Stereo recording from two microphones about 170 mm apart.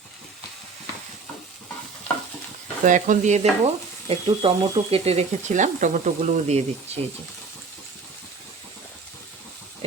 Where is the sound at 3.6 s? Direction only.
35° right (ahead or behind).